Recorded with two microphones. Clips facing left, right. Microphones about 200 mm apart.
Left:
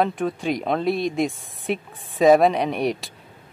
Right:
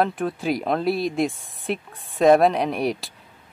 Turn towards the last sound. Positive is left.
turn(degrees=0)  # may be behind; listen again after turning